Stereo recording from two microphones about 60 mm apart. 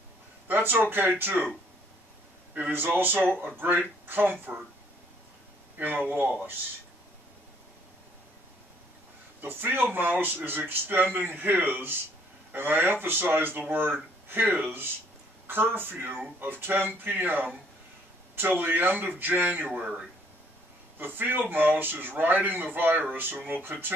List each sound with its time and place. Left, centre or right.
0.5 s a man's voice: right
2.7 s a man's voice: right
5.8 s a man's voice: right
9.4 s a man's voice: right
19.7 s speech: centre
21.0 s a man's voice: right